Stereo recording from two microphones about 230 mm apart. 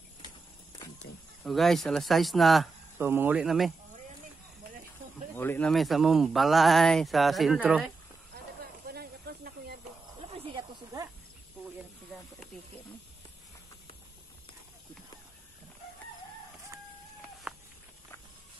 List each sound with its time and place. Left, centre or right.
1.4 s speech: centre
5.3 s speech: centre
8.8 s snake: right
10.3 s snake: centre
17.5 s walk: centre